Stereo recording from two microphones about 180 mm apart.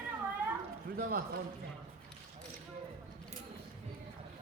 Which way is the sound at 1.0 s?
55° right (ahead or behind).